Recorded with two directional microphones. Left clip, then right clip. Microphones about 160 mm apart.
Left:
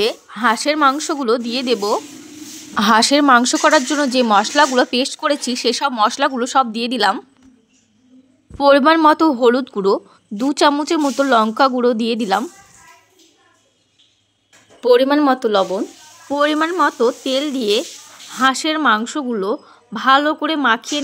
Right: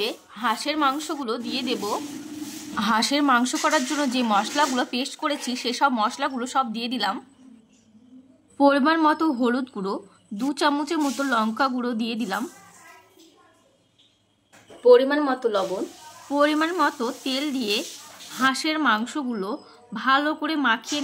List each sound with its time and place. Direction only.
0.0 s a woman's voice: 50° left (ahead or behind)
8.5 s a woman's voice: 50° left (ahead or behind)
14.8 s speech: 90° left
16.3 s speech: 35° left (ahead or behind)